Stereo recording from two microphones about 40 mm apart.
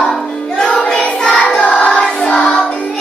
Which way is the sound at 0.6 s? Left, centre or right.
Centre.